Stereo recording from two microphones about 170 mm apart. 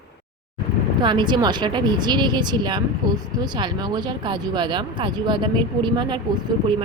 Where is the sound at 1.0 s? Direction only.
25° right (ahead or behind).